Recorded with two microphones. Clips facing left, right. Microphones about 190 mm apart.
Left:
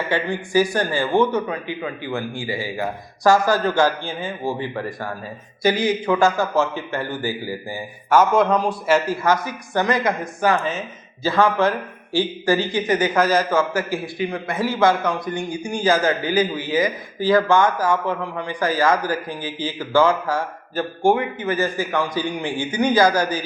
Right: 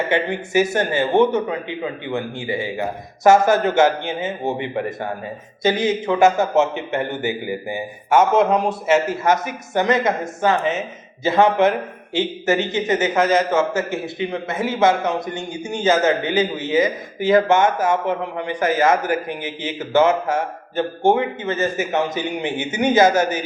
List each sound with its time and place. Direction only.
0.1 s a man's voice: 25° right (ahead or behind)